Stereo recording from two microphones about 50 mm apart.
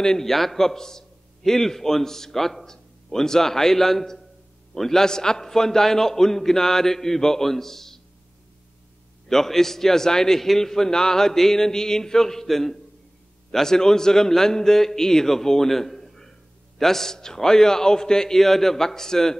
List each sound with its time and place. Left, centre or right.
0.0 s a man's voice: centre
9.3 s a man's voice: centre